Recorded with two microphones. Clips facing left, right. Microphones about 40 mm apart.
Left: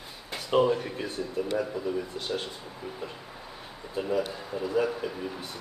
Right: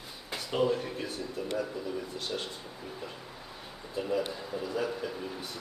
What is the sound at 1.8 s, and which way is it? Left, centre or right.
Speech, centre.